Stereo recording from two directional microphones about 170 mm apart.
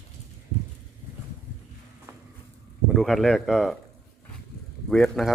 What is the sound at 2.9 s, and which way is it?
Speech, centre (ahead or behind).